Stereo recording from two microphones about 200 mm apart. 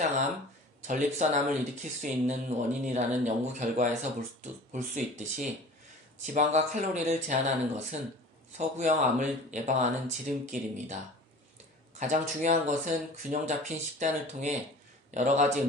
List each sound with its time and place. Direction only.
0.9 s speech: 40° right (ahead or behind)
11.9 s speech: 35° right (ahead or behind)